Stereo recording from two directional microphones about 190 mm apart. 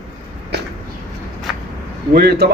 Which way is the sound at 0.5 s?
60° right (ahead or behind).